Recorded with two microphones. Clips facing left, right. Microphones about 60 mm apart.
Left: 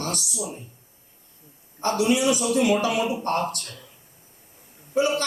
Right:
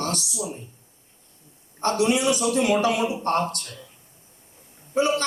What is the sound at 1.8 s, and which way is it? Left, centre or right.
A man's voice, right.